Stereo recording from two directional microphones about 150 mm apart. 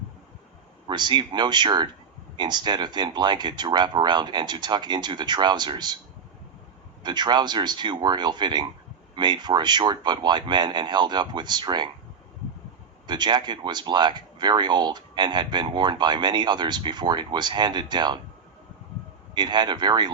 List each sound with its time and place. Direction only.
0.9 s speech: 30° right (ahead or behind)
7.0 s speech: 30° right (ahead or behind)
13.1 s speech: 30° right (ahead or behind)
19.3 s speech: 30° right (ahead or behind)